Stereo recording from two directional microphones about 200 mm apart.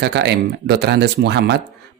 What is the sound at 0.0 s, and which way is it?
Speech, 55° right (ahead or behind).